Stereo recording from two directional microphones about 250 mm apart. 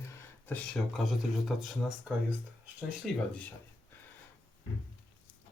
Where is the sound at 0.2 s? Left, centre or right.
Centre.